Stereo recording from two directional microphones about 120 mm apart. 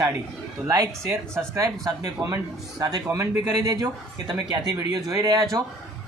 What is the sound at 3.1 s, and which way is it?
Speech, 20° right (ahead or behind).